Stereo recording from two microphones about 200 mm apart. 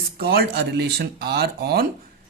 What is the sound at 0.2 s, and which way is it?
Speech, 50° right (ahead or behind).